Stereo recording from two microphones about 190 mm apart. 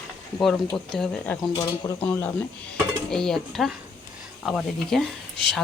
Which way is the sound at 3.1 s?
5° left (ahead or behind).